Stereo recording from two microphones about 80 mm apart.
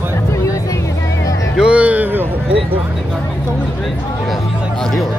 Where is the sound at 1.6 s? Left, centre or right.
Centre.